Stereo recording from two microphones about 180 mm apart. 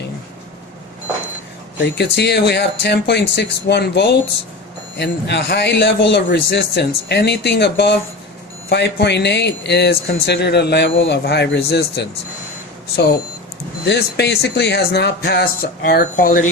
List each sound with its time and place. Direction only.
1.8 s speech: 70° left (ahead or behind)
13.8 s speech: 70° left (ahead or behind); by 16.5 s 50° left (ahead or behind)